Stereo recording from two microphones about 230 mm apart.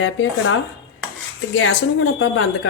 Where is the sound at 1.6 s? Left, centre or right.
Left.